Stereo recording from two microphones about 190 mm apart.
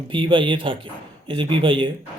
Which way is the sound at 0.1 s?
25° right (ahead or behind).